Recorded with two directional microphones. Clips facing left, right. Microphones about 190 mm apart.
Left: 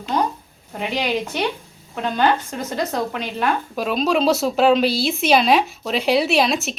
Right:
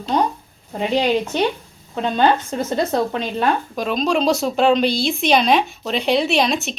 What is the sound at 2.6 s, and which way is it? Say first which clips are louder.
Speech: right 3 dB; 30° right (ahead or behind).